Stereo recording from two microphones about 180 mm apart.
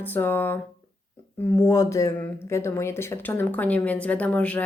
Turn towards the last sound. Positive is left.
turn(degrees=10)  # may be behind; listen again after turning